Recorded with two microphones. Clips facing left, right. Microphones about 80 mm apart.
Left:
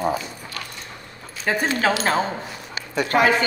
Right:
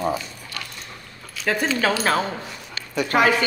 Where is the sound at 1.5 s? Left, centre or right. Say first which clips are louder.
Even; centre.